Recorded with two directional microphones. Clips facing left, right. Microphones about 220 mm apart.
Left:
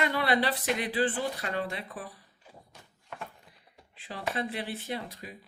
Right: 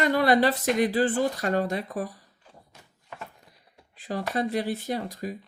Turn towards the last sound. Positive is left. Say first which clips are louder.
# right 7 dB
turn(degrees=-40)  # may be behind; listen again after turning